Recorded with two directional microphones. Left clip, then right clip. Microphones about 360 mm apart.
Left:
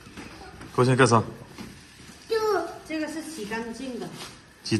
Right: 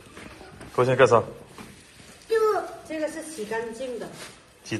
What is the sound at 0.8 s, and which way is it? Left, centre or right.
Speech, centre.